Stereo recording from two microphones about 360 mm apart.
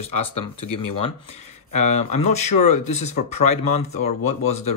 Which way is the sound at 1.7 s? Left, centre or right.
Centre.